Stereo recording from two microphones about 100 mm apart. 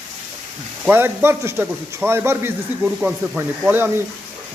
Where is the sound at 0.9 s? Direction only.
20° right (ahead or behind).